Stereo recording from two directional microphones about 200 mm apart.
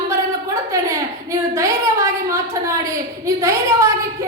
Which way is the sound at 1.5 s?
15° right (ahead or behind).